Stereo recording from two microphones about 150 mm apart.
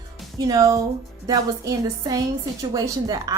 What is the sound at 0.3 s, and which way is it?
A woman's voice, 25° right (ahead or behind).